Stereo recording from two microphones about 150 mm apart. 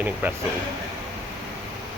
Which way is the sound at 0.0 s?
10° right (ahead or behind).